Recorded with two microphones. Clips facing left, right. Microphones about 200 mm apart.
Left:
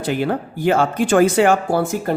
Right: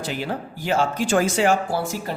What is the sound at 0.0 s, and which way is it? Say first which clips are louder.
Speech: left 7 dB; 55° left (ahead or behind).